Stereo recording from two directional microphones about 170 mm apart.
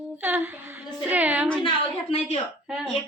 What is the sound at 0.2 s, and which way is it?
Speech, 15° right (ahead or behind).